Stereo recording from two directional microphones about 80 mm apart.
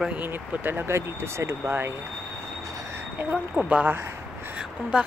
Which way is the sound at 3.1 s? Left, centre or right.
Centre.